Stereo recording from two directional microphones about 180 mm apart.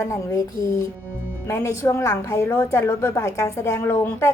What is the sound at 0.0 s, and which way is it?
Speech, 15° left (ahead or behind).